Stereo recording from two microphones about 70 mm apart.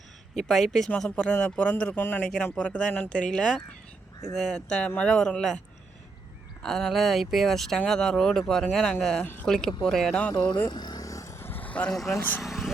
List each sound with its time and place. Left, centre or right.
0.3 s speech: centre
3.2 s speech: centre
6.6 s speech: centre
9.2 s speech: left
9.5 s speech: centre
10.3 s speech: left
11.0 s music: left
11.3 s vehicle: left
11.9 s speech: centre
12.4 s vehicle: centre